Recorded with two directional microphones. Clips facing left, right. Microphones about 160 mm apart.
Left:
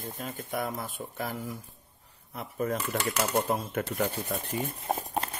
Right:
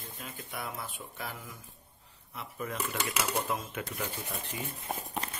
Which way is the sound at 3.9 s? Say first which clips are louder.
Left 8 dB; 55° left (ahead or behind).